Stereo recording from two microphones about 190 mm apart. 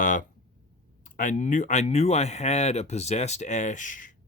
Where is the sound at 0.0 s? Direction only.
45° left (ahead or behind).